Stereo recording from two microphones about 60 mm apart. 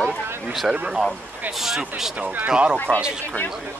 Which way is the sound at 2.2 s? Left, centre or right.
Right.